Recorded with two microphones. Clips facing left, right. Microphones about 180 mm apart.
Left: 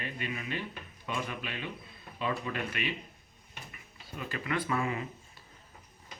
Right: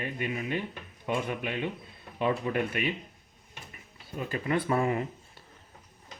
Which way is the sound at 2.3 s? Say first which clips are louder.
Right 6 dB; 30° right (ahead or behind).